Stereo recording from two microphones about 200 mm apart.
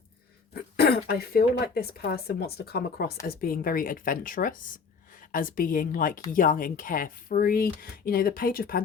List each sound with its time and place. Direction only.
0.5 s speech: 50° left (ahead or behind)